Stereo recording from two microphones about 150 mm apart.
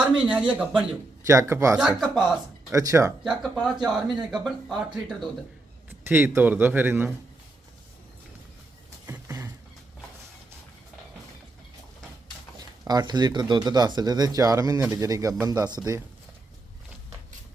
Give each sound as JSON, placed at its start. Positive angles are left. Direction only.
{"t": 0.0, "sound": "a man's voice", "side_deg": -10}
{"t": 1.3, "sound": "speech", "side_deg": -20}
{"t": 1.7, "sound": "speech", "side_deg": -5}
{"t": 2.7, "sound": "speech", "side_deg": -20}
{"t": 3.9, "sound": "speech", "side_deg": -5}
{"t": 5.9, "sound": "a man's voice", "side_deg": -15}
{"t": 9.0, "sound": "a sound", "side_deg": -15}
{"t": 12.5, "sound": "speech", "side_deg": -25}